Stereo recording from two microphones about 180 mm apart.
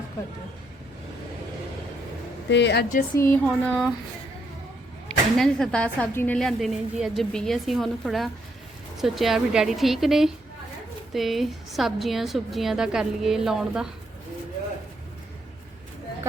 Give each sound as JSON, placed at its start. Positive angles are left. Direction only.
{"t": 2.5, "sound": "a woman's voice", "side_deg": 75}
{"t": 3.2, "sound": "speech", "side_deg": 10}
{"t": 5.0, "sound": "speech", "side_deg": 5}